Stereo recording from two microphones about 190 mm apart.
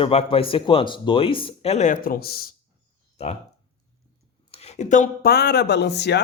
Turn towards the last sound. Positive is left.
turn(degrees=60)  # may be behind; listen again after turning